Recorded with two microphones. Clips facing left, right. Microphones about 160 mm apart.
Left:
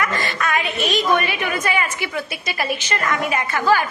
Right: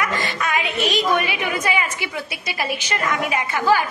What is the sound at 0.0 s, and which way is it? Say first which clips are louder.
A woman's voice: left 1 dB; 15° right (ahead or behind).